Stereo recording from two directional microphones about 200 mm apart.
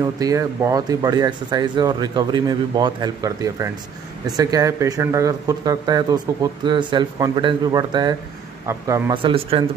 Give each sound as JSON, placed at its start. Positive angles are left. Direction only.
{"t": 0.0, "sound": "a man's voice", "side_deg": -15}
{"t": 9.2, "sound": "speech", "side_deg": -25}